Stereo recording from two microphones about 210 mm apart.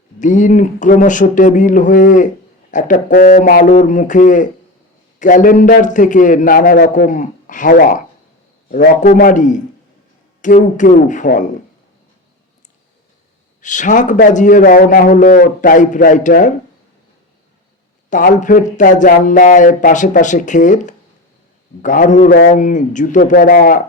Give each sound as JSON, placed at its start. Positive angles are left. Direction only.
{"t": 0.2, "sound": "a man's voice", "side_deg": 35}
{"t": 13.6, "sound": "a man's voice", "side_deg": 35}
{"t": 18.1, "sound": "a man's voice", "side_deg": 35}